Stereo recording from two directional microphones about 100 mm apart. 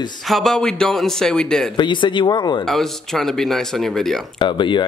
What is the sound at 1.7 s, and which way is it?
Speech, 50° left (ahead or behind).